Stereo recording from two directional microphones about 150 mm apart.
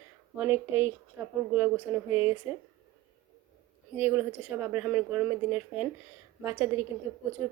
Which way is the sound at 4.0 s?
15° right (ahead or behind).